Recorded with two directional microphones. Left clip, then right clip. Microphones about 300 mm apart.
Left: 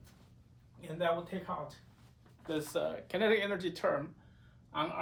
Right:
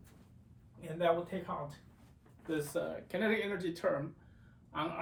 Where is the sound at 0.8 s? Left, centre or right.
Centre.